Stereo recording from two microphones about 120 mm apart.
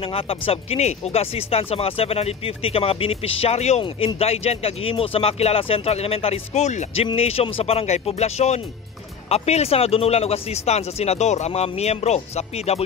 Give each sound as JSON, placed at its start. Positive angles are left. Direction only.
{"t": 0.0, "sound": "speech", "side_deg": 50}
{"t": 0.5, "sound": "speech", "side_deg": 65}
{"t": 3.8, "sound": "speech", "side_deg": 50}
{"t": 7.2, "sound": "speech", "side_deg": 55}